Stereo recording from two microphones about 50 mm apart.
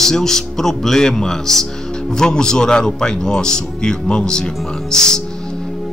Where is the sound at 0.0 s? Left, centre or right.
Centre.